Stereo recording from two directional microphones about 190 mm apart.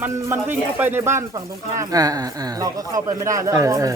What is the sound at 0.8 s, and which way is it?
Speech, 10° right (ahead or behind).